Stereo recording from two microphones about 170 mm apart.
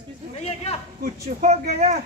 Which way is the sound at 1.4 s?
40° right (ahead or behind).